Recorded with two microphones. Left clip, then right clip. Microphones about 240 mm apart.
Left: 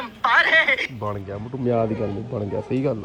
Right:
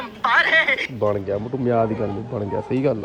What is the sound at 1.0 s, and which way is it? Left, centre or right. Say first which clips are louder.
Speech: right 8 dB; right.